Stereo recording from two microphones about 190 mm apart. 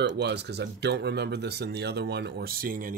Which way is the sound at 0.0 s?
65° right (ahead or behind).